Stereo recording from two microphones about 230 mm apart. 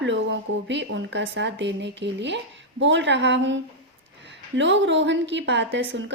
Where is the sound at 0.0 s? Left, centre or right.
Right.